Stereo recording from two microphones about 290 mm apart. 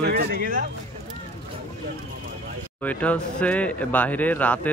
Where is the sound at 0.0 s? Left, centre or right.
Right.